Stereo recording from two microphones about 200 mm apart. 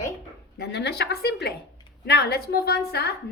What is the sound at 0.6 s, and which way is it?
A woman's voice, 55° left (ahead or behind).